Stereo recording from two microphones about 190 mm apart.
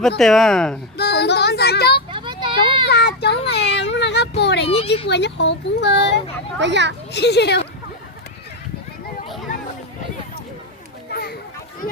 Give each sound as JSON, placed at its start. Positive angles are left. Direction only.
{"t": 0.2, "sound": "speech", "side_deg": 0}
{"t": 0.9, "sound": "speech", "side_deg": 60}
{"t": 2.0, "sound": "a sound", "side_deg": -25}
{"t": 2.9, "sound": "child singing", "side_deg": 60}
{"t": 3.8, "sound": "a sound", "side_deg": 65}
{"t": 4.6, "sound": "speech", "side_deg": 30}
{"t": 5.0, "sound": "speech", "side_deg": 65}
{"t": 6.6, "sound": "a child's voice", "side_deg": -70}
{"t": 7.1, "sound": "speech", "side_deg": 60}
{"t": 11.1, "sound": "children playing", "side_deg": 55}